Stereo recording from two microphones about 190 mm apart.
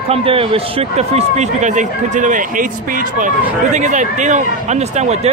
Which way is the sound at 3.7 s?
40° right (ahead or behind).